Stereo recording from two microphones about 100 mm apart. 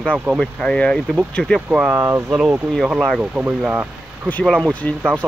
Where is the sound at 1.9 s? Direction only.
30° right (ahead or behind).